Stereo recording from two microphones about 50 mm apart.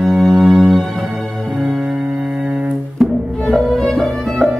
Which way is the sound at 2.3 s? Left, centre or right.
Right.